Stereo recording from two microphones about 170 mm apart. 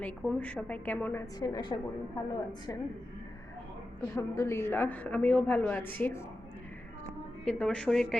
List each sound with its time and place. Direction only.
0.0 s a woman's voice: 5° left (ahead or behind)
1.4 s a woman's voice: 25° left (ahead or behind)
4.1 s a woman's voice: 15° left (ahead or behind)
7.4 s a woman's voice: 5° left (ahead or behind)